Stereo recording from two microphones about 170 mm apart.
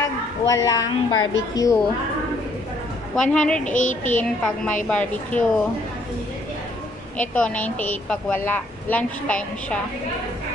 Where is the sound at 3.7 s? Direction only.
50° left (ahead or behind).